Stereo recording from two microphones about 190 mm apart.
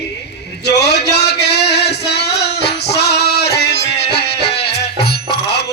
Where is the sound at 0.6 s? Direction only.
60° left (ahead or behind).